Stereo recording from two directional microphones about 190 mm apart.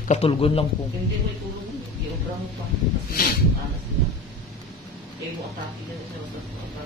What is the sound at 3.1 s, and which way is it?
Speech, 50° left (ahead or behind).